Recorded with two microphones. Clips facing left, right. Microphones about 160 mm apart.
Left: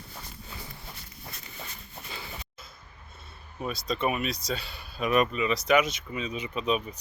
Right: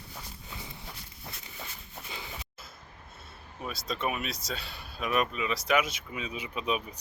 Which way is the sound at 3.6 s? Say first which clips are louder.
Left 4 dB; centre (ahead or behind).